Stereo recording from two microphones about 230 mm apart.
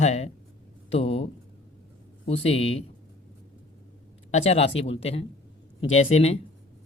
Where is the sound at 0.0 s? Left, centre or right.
Left.